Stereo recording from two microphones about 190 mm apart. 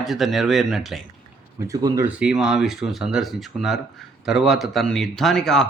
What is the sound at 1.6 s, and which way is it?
Speech, 15° right (ahead or behind).